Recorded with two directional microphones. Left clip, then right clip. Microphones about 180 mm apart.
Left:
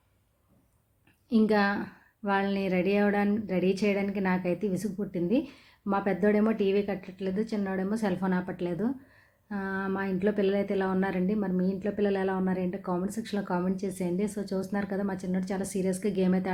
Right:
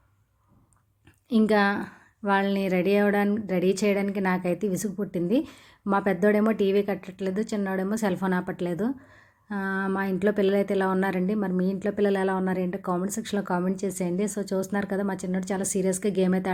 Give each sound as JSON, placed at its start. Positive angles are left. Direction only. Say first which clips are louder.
{"t": 1.3, "sound": "a woman's voice", "louder": "right 3 dB", "side_deg": -15}